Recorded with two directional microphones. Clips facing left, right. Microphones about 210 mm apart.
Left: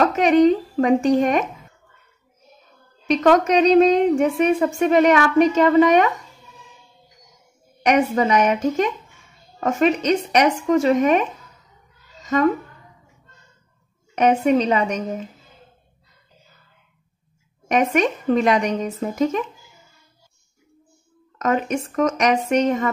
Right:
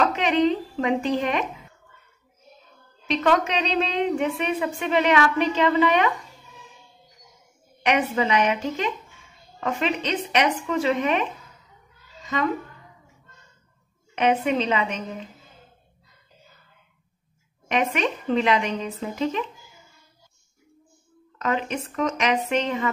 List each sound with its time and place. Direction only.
0.0 s speech: 45° left (ahead or behind)
3.1 s a woman's voice: 45° left (ahead or behind)
7.8 s a woman's voice: 45° left (ahead or behind)
12.2 s a sound: 45° left (ahead or behind)
14.1 s a woman's voice: 45° left (ahead or behind)
17.6 s a woman's voice: 45° left (ahead or behind)
21.4 s a woman's voice: 45° left (ahead or behind)